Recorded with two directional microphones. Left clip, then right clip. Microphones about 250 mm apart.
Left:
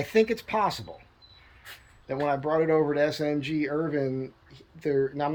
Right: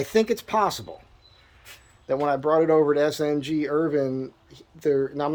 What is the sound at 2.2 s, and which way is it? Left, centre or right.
Speech, centre.